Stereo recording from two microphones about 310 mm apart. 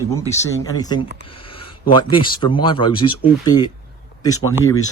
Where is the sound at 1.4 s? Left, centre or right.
Centre.